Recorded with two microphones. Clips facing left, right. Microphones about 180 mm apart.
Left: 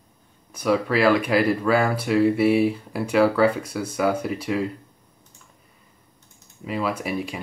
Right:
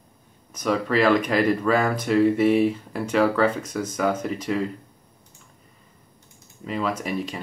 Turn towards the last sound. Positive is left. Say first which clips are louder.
# even
turn(degrees=10)  # may be behind; listen again after turning